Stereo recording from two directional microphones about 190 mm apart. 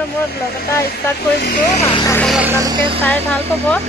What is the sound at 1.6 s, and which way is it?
Speech, 40° left (ahead or behind).